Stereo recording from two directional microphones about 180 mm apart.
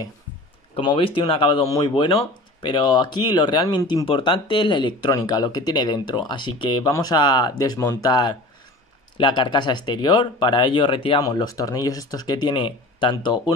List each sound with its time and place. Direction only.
0.7 s speech: 30° left (ahead or behind)